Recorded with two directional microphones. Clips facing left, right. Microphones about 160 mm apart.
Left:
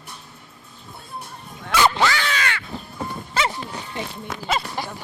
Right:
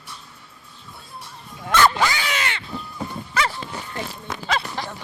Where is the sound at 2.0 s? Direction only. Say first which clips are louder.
Left 1 dB; 15° right (ahead or behind).